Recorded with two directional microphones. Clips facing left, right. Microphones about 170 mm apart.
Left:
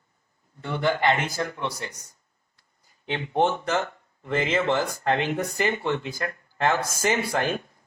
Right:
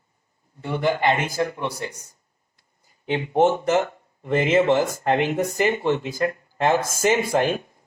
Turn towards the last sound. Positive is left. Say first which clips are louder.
# right 5 dB
turn(degrees=-20)  # may be behind; listen again after turning